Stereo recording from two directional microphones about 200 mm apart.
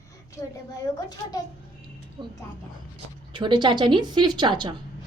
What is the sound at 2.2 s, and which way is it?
Speech, 25° right (ahead or behind).